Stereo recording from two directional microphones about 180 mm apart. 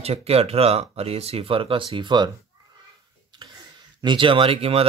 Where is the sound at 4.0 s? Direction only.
25° right (ahead or behind).